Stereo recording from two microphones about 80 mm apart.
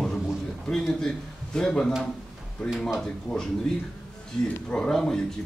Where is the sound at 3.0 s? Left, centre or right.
Centre.